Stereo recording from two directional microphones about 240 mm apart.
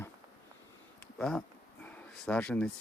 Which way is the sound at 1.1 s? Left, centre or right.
Centre.